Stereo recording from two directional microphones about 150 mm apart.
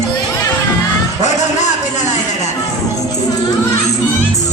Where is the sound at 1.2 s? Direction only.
50° left (ahead or behind).